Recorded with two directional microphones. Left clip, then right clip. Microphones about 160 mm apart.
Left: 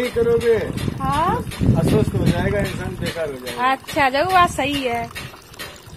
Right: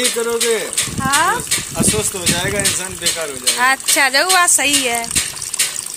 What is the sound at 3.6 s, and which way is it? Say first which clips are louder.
Speech: right 4 dB; 10° right (ahead or behind).